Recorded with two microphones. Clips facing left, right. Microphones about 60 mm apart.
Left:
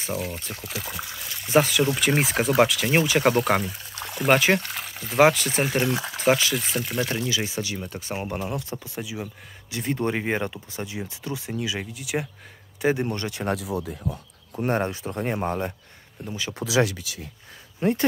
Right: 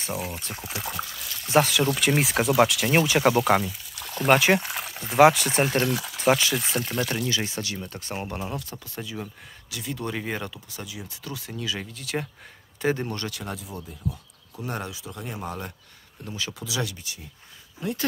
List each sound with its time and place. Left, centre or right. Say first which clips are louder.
0.1 s speech: left 2 dB; centre
1.0 s speech: left 1 dB; centre
1.4 s speech: left 1 dB; centre
3.6 s pour: left 2 dB; left
4.2 s speech: even; centre
5.8 s speech: left 1 dB; centre
6.1 s speech: even; centre
6.8 s speech: left 1 dB; centre
9.7 s speech: left 6 dB; left
13.5 s speech: left 9 dB; left
14.0 s speech: left 2 dB; left
16.3 s speech: left 1 dB; centre
16.6 s speech: left 12 dB; left
17.8 s speech: left 8 dB; left